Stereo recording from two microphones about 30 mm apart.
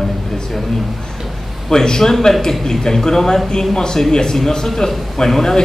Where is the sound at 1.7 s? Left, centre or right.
Centre.